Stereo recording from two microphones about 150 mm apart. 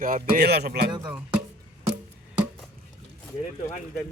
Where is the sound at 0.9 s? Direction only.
30° right (ahead or behind).